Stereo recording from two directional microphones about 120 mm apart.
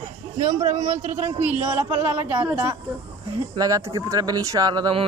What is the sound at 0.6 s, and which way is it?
Speech, 90° right.